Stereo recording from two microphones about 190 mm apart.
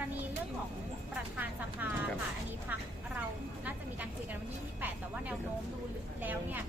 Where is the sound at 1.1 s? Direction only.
10° right (ahead or behind).